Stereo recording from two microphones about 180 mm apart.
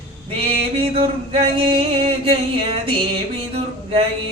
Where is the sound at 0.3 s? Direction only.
30° right (ahead or behind).